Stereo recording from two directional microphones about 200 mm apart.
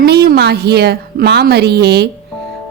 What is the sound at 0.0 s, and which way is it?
A woman's voice, 55° right (ahead or behind).